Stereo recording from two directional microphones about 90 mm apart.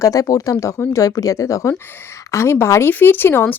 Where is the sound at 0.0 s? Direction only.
40° left (ahead or behind).